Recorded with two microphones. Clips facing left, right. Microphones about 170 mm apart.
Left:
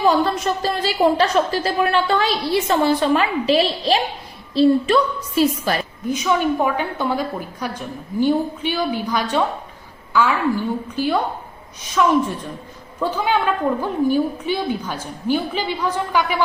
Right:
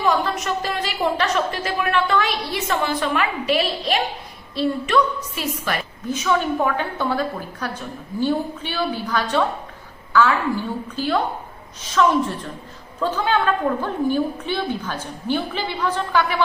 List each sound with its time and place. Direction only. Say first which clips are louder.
0.0 s a woman's voice: left 4 dB; 30° left (ahead or behind)
6.1 s a woman's voice: left 2 dB; 10° left (ahead or behind)